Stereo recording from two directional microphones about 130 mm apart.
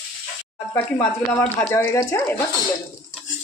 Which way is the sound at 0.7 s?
15° left (ahead or behind).